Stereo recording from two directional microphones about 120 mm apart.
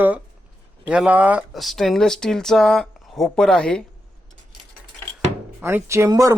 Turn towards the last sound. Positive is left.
turn(degrees=-30)  # may be behind; listen again after turning